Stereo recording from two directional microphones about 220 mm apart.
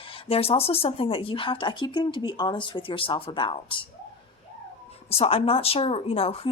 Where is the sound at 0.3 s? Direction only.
25° left (ahead or behind).